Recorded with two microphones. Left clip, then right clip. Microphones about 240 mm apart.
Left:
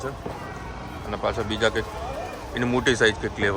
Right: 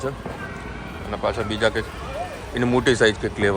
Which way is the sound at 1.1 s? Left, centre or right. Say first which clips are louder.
Right 2 dB; centre.